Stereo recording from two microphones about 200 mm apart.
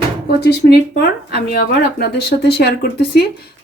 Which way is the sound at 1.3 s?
50° left (ahead or behind).